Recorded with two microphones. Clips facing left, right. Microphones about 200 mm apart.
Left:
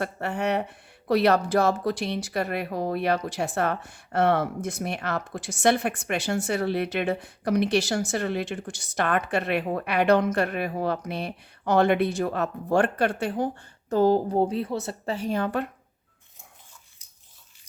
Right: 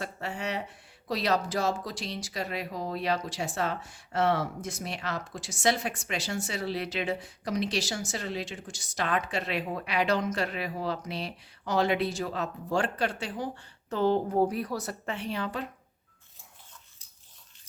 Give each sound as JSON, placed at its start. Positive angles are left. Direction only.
{"t": 0.0, "sound": "speech", "side_deg": 60}
{"t": 14.3, "sound": "speech", "side_deg": 25}